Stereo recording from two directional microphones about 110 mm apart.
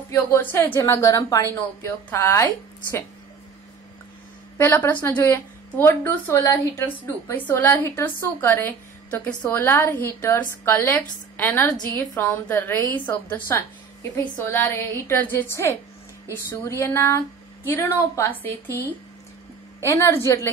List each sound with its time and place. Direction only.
0.1 s speech: 20° left (ahead or behind)
1.4 s speech: 20° left (ahead or behind)
4.6 s a woman's voice: 20° left (ahead or behind)
19.8 s speech: 25° left (ahead or behind)